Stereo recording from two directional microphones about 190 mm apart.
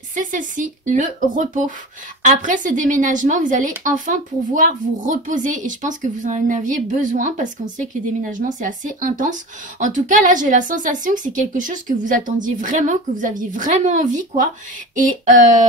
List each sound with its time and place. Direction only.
0.1 s speech: 45° right (ahead or behind)